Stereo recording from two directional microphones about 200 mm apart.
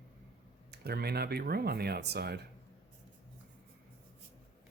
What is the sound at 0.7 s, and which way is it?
Speech, 50° right (ahead or behind).